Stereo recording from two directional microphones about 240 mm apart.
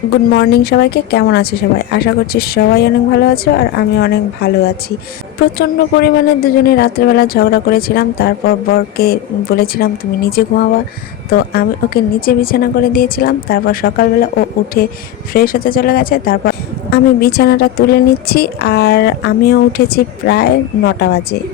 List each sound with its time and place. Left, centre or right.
0.3 s a woman's voice: left
5.5 s a woman's voice: left